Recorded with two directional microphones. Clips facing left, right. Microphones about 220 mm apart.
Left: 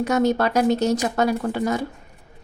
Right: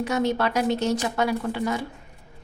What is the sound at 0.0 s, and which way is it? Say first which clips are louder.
A woman's voice: left 4 dB; 40° left (ahead or behind).